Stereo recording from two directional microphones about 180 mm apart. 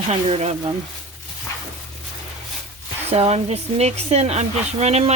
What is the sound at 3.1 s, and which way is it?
Speech, 35° right (ahead or behind).